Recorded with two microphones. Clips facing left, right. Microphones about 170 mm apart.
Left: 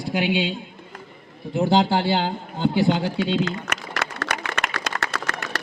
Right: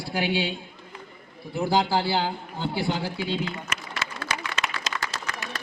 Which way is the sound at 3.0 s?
80° left.